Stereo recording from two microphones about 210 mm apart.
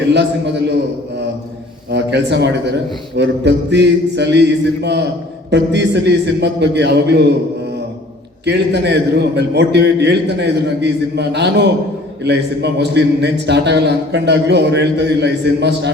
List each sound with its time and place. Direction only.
1.9 s a man's voice: 55° right (ahead or behind)
8.4 s a man's voice: 55° right (ahead or behind)